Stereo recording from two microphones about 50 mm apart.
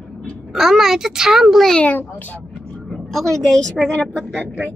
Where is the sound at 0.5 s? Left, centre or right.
Centre.